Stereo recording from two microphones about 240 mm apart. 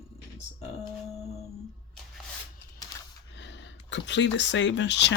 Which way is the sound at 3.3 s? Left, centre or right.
Left.